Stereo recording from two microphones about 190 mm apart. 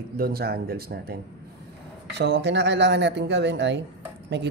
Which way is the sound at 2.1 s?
65° right (ahead or behind).